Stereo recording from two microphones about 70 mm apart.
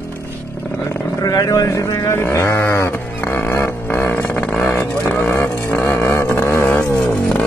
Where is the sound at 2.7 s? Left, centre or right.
Left.